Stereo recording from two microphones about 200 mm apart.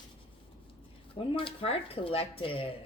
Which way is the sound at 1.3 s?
25° left (ahead or behind).